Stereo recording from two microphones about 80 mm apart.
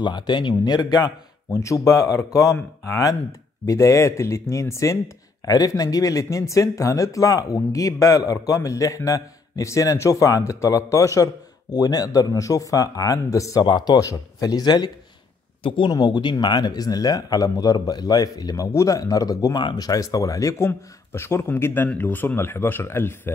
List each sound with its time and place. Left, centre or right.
0.0 s speech: left
1.6 s speech: left
11.7 s speech: left
13.6 s speech: left
13.9 s speech: left
15.6 s speech: left
15.9 s speech: left
18.7 s speech: left
19.5 s speech: left